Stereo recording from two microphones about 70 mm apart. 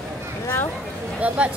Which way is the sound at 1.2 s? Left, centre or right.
Centre.